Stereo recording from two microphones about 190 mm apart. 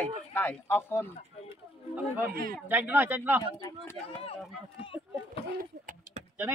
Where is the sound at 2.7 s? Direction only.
10° right (ahead or behind).